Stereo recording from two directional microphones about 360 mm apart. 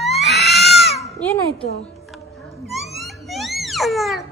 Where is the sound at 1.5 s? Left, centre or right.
Centre.